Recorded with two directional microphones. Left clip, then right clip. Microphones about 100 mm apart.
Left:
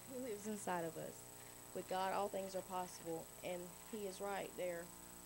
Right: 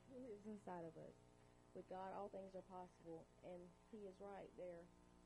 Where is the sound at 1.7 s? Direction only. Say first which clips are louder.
Left 12 dB; 15° left (ahead or behind).